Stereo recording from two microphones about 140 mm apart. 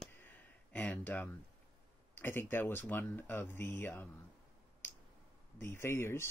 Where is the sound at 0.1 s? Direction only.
15° left (ahead or behind).